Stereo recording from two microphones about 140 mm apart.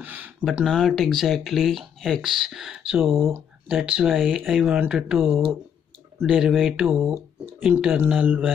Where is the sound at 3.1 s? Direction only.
15° right (ahead or behind).